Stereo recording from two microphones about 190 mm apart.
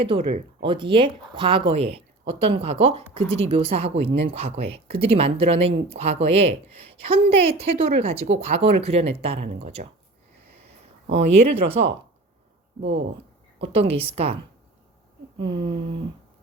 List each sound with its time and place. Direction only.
0.0 s speech: 30° right (ahead or behind)
11.1 s speech: 30° right (ahead or behind)
13.6 s speech: 30° right (ahead or behind)
15.4 s speech: 25° right (ahead or behind)